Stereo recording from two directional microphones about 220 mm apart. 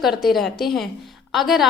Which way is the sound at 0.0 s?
Centre (ahead or behind).